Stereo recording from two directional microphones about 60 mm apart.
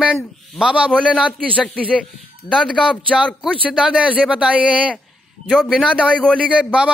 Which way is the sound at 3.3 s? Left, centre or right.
Centre.